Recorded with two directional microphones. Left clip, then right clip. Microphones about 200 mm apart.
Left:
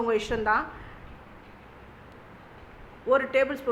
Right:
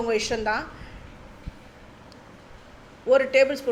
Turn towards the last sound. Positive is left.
turn(degrees=-5)  # may be behind; listen again after turning